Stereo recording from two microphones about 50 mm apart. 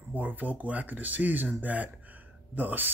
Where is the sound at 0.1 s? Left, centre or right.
Right.